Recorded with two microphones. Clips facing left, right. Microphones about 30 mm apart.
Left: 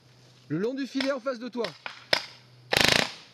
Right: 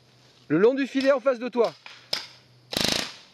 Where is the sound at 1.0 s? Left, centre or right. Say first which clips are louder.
Right 11 dB; right.